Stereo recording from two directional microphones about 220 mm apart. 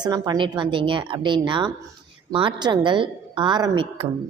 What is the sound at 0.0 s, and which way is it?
A woman's voice, 20° right (ahead or behind).